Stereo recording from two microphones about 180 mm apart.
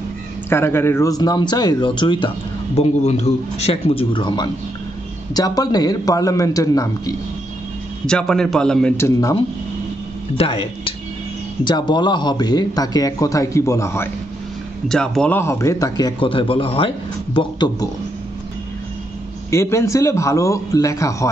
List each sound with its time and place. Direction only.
0.5 s a man's voice: 15° left (ahead or behind)
8.1 s a man's voice: 5° left (ahead or behind)
8.9 s speech: 15° left (ahead or behind)
10.3 s a man's voice: 30° left (ahead or behind); by 14.0 s 15° left (ahead or behind)
14.9 s a man's voice: 5° left (ahead or behind); by 17.8 s 25° left (ahead or behind)
19.5 s speech: 15° left (ahead or behind)